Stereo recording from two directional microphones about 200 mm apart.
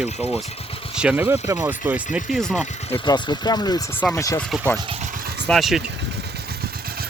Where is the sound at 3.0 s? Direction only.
20° left (ahead or behind).